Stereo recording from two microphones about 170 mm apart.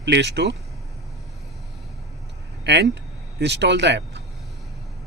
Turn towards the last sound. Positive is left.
turn(degrees=-90)